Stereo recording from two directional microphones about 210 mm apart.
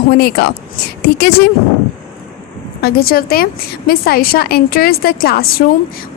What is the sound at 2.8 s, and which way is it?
A woman's voice, 45° left (ahead or behind).